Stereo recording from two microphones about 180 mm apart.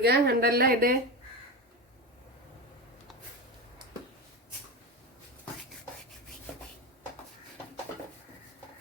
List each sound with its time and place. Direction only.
0.0 s speech: 60° right (ahead or behind)